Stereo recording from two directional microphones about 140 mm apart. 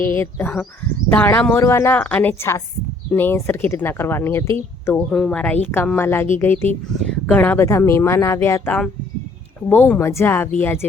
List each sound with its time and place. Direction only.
0.0 s speech: 15° left (ahead or behind)
5.1 s speech: 5° left (ahead or behind)